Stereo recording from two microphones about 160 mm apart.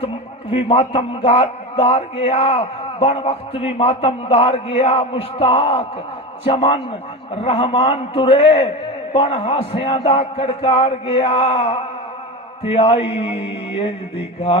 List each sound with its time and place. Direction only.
0.5 s a man's voice: 35° left (ahead or behind)